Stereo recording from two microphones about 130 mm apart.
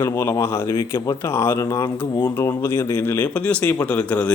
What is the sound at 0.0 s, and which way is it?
Speech, 20° left (ahead or behind).